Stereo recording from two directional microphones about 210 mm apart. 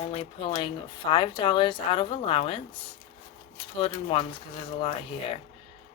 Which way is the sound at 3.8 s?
25° left (ahead or behind).